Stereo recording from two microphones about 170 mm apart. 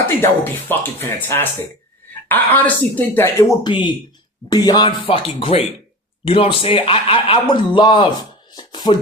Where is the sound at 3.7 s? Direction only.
25° left (ahead or behind).